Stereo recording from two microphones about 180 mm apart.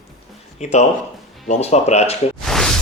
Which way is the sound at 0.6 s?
40° left (ahead or behind).